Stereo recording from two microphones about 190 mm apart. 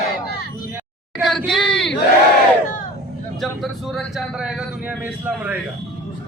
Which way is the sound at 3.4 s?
Centre (ahead or behind).